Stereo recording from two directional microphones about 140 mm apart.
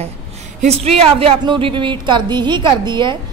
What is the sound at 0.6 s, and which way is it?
A woman's voice, 45° right (ahead or behind).